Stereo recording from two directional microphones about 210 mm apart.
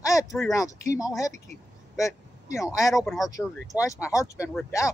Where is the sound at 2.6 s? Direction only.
15° left (ahead or behind).